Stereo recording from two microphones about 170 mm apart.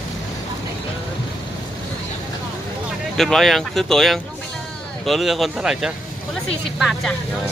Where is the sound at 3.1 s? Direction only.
Centre (ahead or behind).